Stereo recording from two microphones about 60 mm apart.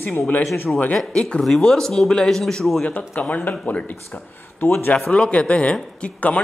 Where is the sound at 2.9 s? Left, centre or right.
Left.